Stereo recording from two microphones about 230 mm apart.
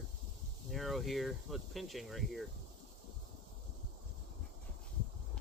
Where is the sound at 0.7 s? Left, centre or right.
Centre.